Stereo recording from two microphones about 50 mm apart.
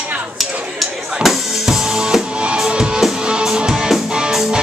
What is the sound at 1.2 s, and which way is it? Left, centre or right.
Music, centre.